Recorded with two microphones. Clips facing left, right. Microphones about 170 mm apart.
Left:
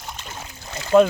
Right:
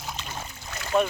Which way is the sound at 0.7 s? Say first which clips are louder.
Left 9 dB; 25° left (ahead or behind).